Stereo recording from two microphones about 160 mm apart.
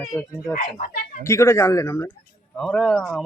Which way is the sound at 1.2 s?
15° left (ahead or behind).